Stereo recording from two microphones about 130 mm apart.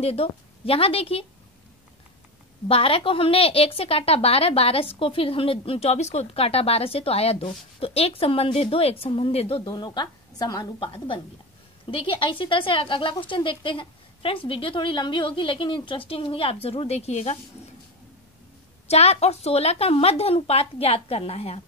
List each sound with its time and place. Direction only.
0.0 s a woman's voice: 50° left (ahead or behind)
2.7 s a woman's voice: 45° left (ahead or behind)
9.7 s a woman's voice: 35° left (ahead or behind)
11.8 s a woman's voice: 45° left (ahead or behind)
18.9 s a woman's voice: 55° left (ahead or behind)